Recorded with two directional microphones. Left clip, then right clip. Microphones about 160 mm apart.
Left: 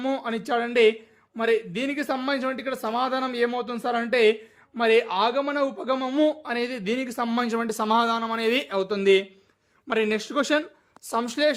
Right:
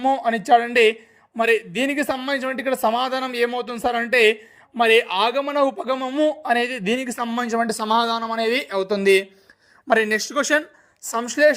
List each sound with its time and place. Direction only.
0.2 s speech: 20° right (ahead or behind)
6.4 s speech: 25° right (ahead or behind)
7.9 s speech: 25° right (ahead or behind)